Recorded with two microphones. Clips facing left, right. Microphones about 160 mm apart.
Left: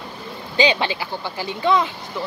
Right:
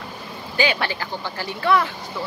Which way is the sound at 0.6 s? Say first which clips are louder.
Left 3 dB; 20° left (ahead or behind).